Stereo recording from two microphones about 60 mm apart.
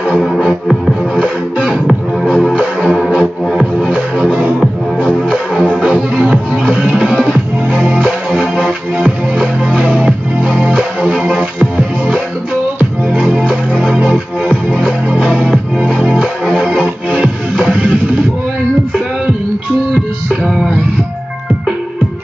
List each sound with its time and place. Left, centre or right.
0.7 s music: centre
1.2 s music: centre
2.2 s music: centre
2.5 s music: centre
5.8 s music: centre
20.2 s music: centre